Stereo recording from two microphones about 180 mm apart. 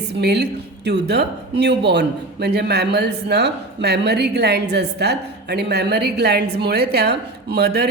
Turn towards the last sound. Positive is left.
turn(degrees=-65)  # may be behind; listen again after turning